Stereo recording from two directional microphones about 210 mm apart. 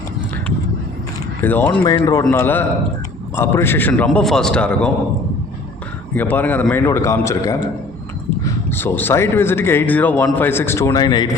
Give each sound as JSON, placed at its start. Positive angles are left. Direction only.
{"t": 1.4, "sound": "a man's voice", "side_deg": 10}
{"t": 1.8, "sound": "a man's voice", "side_deg": 20}
{"t": 6.1, "sound": "a man's voice", "side_deg": 10}
{"t": 8.7, "sound": "a man's voice", "side_deg": 10}